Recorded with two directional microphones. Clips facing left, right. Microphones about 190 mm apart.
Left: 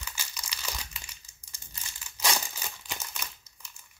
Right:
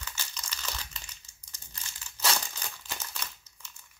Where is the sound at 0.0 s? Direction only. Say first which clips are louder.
Even; 10° left (ahead or behind).